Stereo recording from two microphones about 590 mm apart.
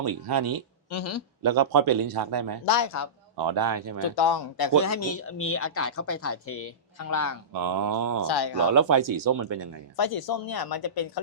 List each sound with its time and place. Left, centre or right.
0.0 s a man's voice: right
0.9 s speech: left
1.4 s a man's voice: right
2.6 s speech: left
3.4 s a man's voice: right
4.1 s speech: left
4.8 s speech: left
7.5 s a man's voice: right
8.3 s speech: left
8.7 s a man's voice: right
10.0 s speech: left